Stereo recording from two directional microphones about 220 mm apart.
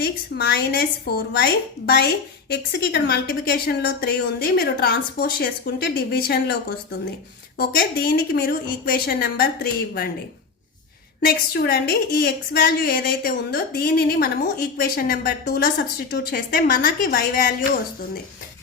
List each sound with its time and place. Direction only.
0.0 s a woman's voice: 45° left (ahead or behind)
7.6 s a woman's voice: 45° left (ahead or behind)
11.3 s a woman's voice: 45° left (ahead or behind)